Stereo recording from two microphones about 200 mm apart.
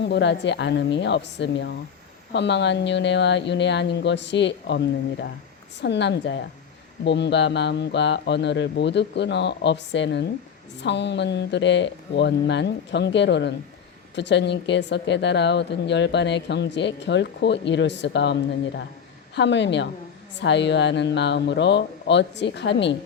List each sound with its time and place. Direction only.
0.0 s speech: 60° left (ahead or behind)
5.8 s speech: 60° left (ahead or behind)
19.4 s speech: 60° left (ahead or behind)